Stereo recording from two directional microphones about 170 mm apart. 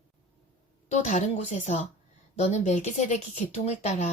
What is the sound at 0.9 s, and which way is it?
Speech, 40° left (ahead or behind).